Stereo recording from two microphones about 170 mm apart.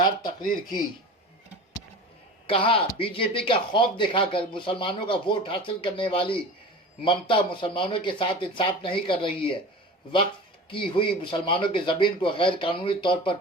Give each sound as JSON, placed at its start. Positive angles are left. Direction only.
{"t": 0.3, "sound": "speech", "side_deg": 55}
{"t": 2.5, "sound": "speech", "side_deg": 35}
{"t": 10.7, "sound": "speech", "side_deg": 30}